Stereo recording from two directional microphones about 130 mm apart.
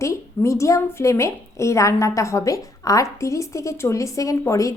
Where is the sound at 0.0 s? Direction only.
20° left (ahead or behind).